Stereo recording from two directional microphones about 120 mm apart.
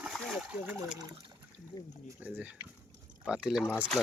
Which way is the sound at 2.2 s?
15° right (ahead or behind).